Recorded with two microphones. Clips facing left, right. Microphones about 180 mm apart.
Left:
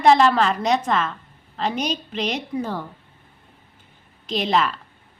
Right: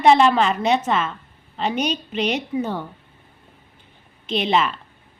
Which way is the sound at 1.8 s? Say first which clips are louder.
Right 4 dB; 35° left (ahead or behind).